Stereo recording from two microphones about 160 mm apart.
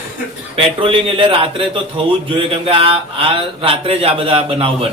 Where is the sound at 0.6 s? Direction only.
35° right (ahead or behind).